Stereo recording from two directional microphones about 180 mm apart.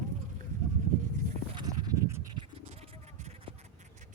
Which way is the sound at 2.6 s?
40° right (ahead or behind).